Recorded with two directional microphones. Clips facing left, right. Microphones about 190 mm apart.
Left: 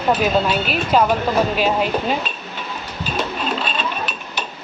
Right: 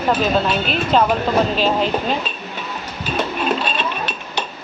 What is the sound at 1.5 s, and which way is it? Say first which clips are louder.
Speech: even; 10° left (ahead or behind).